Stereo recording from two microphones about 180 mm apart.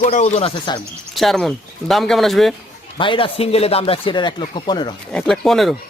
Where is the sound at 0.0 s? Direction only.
40° left (ahead or behind).